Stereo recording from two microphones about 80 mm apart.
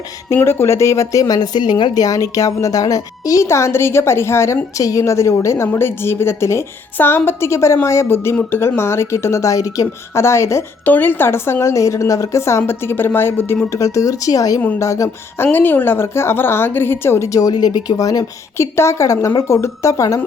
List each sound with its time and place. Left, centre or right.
0.3 s a woman's voice: left
10.8 s speech: left
13.7 s speech: left
15.5 s a woman's voice: left
17.5 s speech: left
18.5 s speech: left